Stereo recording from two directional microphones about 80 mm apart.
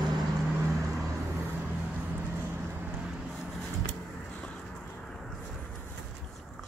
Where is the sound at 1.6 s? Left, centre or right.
Right.